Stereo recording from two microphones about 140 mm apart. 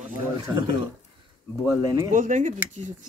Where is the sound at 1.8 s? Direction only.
25° right (ahead or behind).